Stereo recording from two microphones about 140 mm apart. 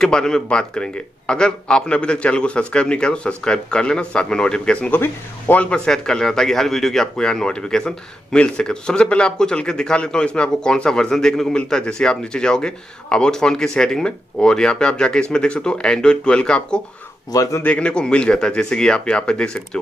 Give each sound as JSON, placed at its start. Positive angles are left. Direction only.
{"t": 0.0, "sound": "a man's voice", "side_deg": 5}
{"t": 17.3, "sound": "speech", "side_deg": 20}
{"t": 17.6, "sound": "speech", "side_deg": 5}